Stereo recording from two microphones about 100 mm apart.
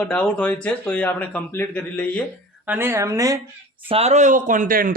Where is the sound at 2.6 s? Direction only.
20° right (ahead or behind).